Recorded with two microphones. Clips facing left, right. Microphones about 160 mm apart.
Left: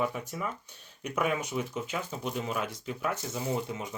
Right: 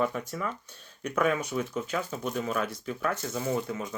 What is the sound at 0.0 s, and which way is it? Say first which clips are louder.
Speech: right 2 dB; 10° left (ahead or behind).